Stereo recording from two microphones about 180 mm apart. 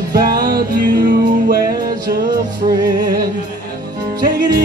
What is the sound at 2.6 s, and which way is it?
Music, 35° right (ahead or behind).